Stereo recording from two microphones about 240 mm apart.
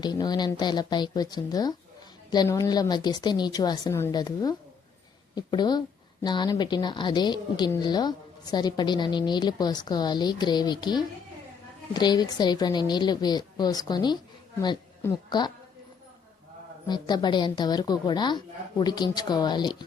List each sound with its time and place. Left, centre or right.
0.0 s a woman's voice: centre
16.8 s a woman's voice: centre